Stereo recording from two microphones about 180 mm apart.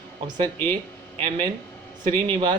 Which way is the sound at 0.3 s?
25° right (ahead or behind).